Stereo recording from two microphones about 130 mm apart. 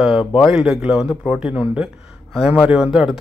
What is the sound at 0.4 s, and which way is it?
Speech, 5° right (ahead or behind).